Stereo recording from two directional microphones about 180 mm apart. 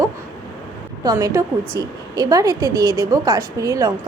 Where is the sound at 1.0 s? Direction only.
20° right (ahead or behind).